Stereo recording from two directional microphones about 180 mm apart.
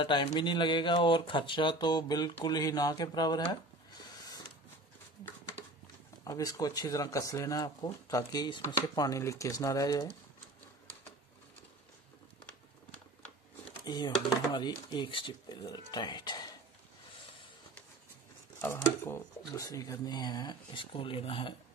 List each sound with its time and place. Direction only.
0.0 s speech: 25° left (ahead or behind)
6.2 s speech: 20° left (ahead or behind)
13.8 s speech: 25° left (ahead or behind)
18.6 s speech: 15° left (ahead or behind); by 21.5 s 30° left (ahead or behind)